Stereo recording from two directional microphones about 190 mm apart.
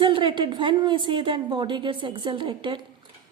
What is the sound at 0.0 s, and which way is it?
A woman's voice, 25° right (ahead or behind).